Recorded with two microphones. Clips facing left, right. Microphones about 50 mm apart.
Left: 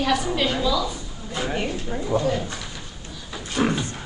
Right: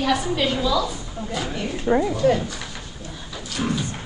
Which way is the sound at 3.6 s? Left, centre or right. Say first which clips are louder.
Left 3 dB; left.